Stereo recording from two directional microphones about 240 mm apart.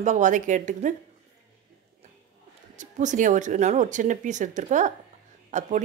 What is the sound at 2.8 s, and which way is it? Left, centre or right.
Speech, right.